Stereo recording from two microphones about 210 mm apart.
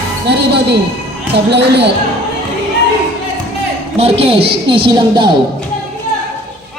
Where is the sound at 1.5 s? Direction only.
55° right (ahead or behind).